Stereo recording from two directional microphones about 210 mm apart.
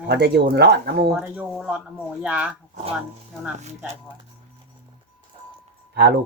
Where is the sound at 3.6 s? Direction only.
35° right (ahead or behind).